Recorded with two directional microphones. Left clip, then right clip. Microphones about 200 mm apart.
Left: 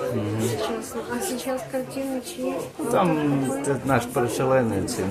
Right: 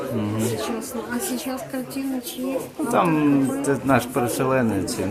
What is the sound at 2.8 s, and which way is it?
Speech, 25° right (ahead or behind).